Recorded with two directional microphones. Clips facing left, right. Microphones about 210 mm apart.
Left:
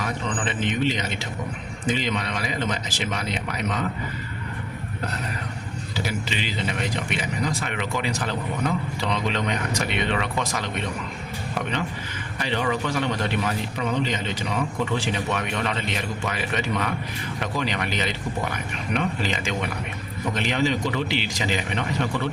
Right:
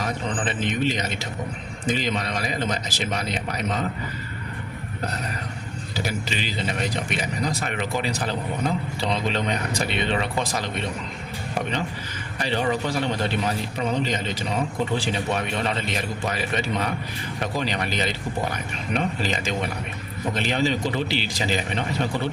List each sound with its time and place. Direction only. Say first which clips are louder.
0.0 s speech: right 1 dB; 35° right (ahead or behind)
5.9 s speech: even; 40° right (ahead or behind)
12.4 s speech: right 1 dB; 35° right (ahead or behind)